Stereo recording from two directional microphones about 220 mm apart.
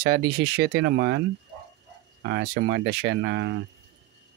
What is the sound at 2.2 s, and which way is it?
Speech, 50° right (ahead or behind).